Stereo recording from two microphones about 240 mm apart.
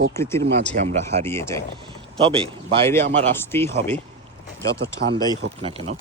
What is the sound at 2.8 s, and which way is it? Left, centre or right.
Speech, centre.